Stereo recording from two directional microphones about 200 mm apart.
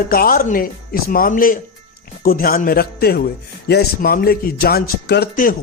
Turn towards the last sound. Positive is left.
turn(degrees=55)  # may be behind; listen again after turning